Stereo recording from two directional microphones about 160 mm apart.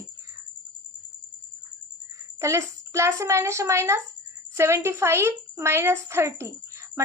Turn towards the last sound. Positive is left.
turn(degrees=-15)  # may be behind; listen again after turning